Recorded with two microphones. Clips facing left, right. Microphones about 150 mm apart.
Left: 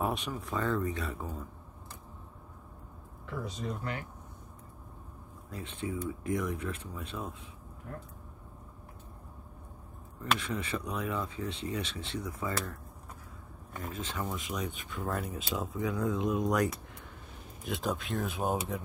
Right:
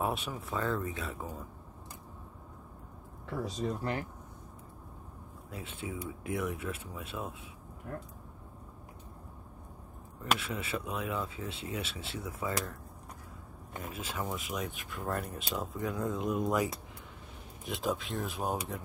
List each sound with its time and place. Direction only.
0.0 s speech: 5° right (ahead or behind)
3.4 s speech: 35° right (ahead or behind)
5.5 s speech: 10° right (ahead or behind)
10.4 s speech: 10° right (ahead or behind)
13.7 s speech: 10° right (ahead or behind)